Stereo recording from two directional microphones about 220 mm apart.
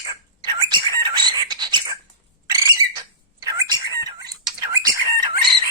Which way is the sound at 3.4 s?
15° right (ahead or behind).